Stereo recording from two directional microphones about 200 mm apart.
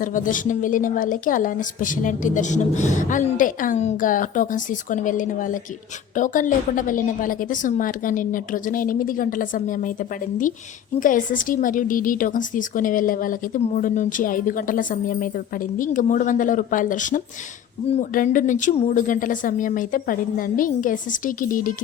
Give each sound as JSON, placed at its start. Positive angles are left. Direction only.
{"t": 0.0, "sound": "a woman's voice", "side_deg": 40}